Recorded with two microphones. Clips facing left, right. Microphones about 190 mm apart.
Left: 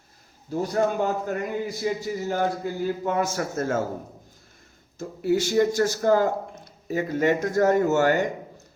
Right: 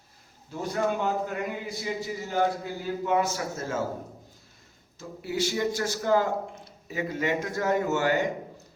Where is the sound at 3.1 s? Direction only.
50° left (ahead or behind).